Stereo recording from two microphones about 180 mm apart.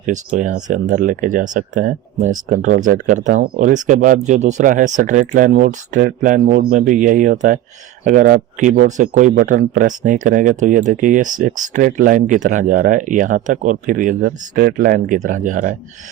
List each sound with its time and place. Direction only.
0.0 s speech: 45° right (ahead or behind)